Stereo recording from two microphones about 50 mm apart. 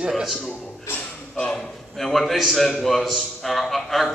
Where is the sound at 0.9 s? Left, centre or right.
Left.